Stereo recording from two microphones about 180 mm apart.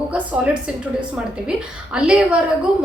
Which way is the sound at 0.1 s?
5° right (ahead or behind).